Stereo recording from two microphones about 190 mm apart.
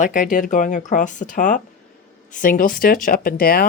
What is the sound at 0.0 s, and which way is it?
Speech, 45° left (ahead or behind).